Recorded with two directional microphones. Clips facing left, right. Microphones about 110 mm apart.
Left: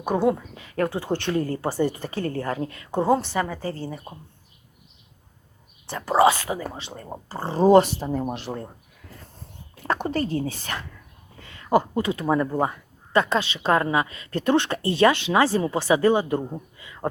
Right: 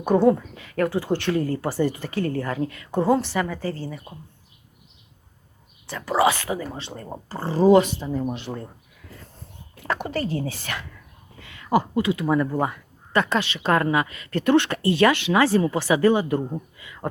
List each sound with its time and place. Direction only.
0.0 s speech: 10° left (ahead or behind)
0.5 s speech: 25° left (ahead or behind)
5.9 s speech: 30° left (ahead or behind)
6.8 s speech: 10° left (ahead or behind)
7.4 s speech: 25° left (ahead or behind)
9.8 s speech: 35° left (ahead or behind)
11.4 s a sound: 35° left (ahead or behind)
11.9 s speech: 35° left (ahead or behind)
16.7 s a sound: 25° left (ahead or behind)